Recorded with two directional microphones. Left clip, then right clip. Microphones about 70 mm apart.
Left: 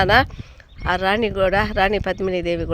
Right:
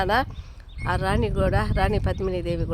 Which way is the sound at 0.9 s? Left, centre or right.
Left.